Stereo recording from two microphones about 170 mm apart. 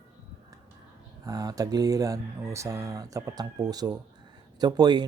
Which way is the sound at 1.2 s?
20° right (ahead or behind).